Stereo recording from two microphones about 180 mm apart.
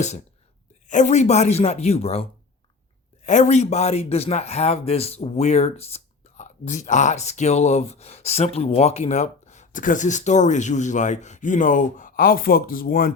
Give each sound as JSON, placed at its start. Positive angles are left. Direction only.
{"t": 0.9, "sound": "speech", "side_deg": 40}
{"t": 3.2, "sound": "speech", "side_deg": 40}